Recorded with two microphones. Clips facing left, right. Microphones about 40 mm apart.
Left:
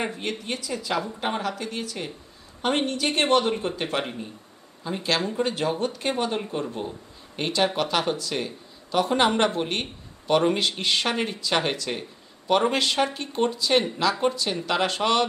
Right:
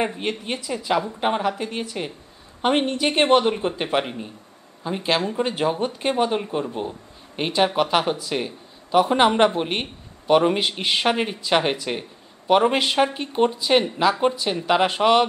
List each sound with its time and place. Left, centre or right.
0.0 s speech: right